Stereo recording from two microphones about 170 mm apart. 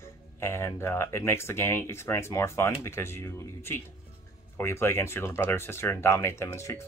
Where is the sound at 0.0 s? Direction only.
15° left (ahead or behind).